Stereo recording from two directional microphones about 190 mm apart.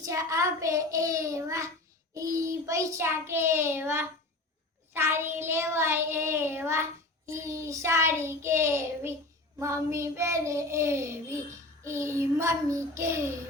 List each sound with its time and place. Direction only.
0.0 s child singing: 15° right (ahead or behind)